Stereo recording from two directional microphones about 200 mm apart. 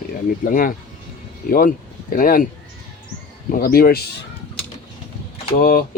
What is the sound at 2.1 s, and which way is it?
Speech, 45° left (ahead or behind).